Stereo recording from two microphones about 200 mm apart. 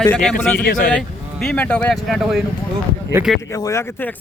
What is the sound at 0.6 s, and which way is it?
Speech, 45° left (ahead or behind).